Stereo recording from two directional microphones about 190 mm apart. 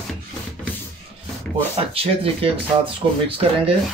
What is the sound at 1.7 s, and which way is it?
Speech, 30° right (ahead or behind).